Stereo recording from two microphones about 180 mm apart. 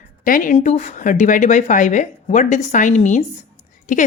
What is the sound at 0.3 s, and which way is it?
Speech, 50° left (ahead or behind).